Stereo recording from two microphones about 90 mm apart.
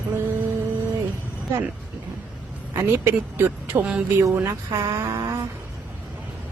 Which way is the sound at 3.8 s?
15° right (ahead or behind).